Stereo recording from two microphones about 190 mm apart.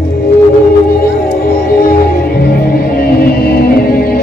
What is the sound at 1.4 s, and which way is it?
Music, 50° left (ahead or behind).